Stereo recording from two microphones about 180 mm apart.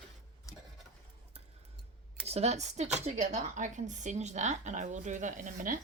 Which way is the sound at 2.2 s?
35° right (ahead or behind).